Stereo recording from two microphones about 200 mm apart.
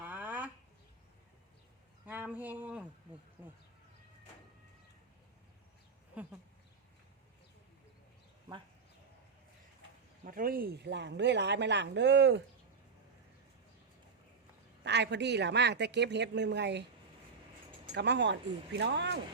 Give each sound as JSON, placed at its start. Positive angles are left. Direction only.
{"t": 0.0, "sound": "a sound", "side_deg": -10}
{"t": 2.0, "sound": "speech", "side_deg": -10}
{"t": 10.2, "sound": "a woman's voice", "side_deg": -45}
{"t": 14.8, "sound": "a woman's voice", "side_deg": -60}
{"t": 17.9, "sound": "a woman's voice", "side_deg": -60}